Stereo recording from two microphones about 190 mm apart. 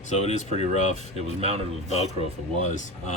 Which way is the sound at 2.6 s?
40° left (ahead or behind).